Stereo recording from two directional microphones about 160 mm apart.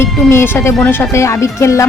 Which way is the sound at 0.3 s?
15° left (ahead or behind).